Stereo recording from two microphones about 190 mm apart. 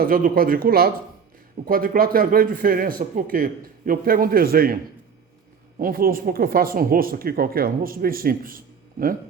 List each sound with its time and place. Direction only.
0.0 s speech: 50° right (ahead or behind)
5.8 s speech: 50° right (ahead or behind)